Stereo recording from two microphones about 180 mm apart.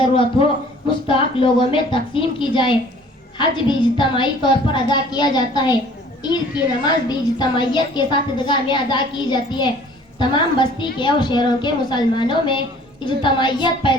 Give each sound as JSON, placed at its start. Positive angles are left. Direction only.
{"t": 0.0, "sound": "a man's voice", "side_deg": 30}
{"t": 6.8, "sound": "a woman's voice", "side_deg": 25}